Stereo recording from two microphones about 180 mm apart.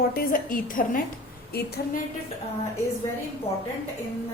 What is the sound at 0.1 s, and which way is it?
Speech, 55° left (ahead or behind).